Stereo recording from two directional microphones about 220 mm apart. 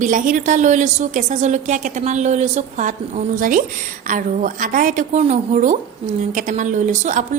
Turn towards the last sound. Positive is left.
turn(degrees=-35)  # may be behind; listen again after turning